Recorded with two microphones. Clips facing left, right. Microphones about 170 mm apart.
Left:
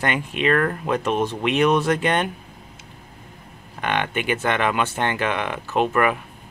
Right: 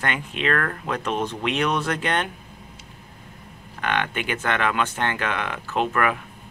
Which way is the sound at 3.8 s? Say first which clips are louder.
Left 2 dB; 10° left (ahead or behind).